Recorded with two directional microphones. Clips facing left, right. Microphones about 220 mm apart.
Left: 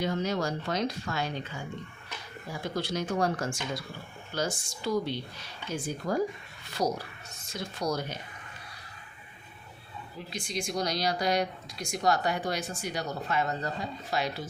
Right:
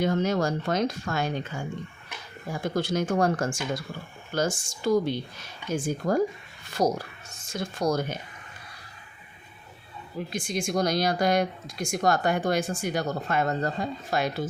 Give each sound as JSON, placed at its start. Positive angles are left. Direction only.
{"t": 0.0, "sound": "speech", "side_deg": -50}
{"t": 10.2, "sound": "speech", "side_deg": -50}